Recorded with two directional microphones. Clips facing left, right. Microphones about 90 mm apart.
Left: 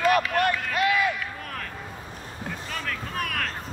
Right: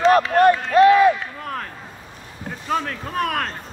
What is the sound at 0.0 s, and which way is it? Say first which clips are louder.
Run: right 8 dB; 30° right (ahead or behind).